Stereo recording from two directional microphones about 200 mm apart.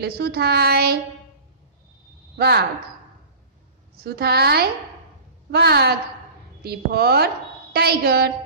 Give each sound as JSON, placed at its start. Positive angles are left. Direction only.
{"t": 0.0, "sound": "child singing", "side_deg": -55}
{"t": 2.3, "sound": "speech", "side_deg": -55}
{"t": 3.9, "sound": "child singing", "side_deg": -50}